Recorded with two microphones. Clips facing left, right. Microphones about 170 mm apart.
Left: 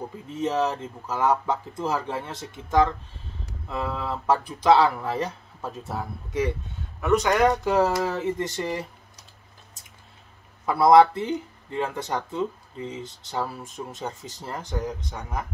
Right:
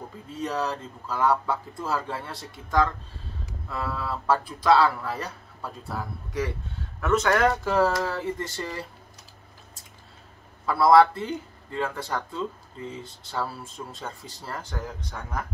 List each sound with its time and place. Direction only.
0.3 s speech: 20° left (ahead or behind)
10.6 s speech: 20° left (ahead or behind)